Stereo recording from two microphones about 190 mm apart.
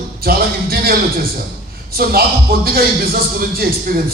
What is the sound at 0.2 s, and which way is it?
A man's voice, 50° right (ahead or behind).